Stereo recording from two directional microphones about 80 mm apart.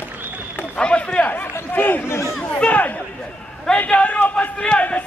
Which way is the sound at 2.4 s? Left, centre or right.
Centre.